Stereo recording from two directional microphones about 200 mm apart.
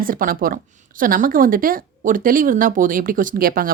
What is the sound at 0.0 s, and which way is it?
A woman's voice, 45° right (ahead or behind).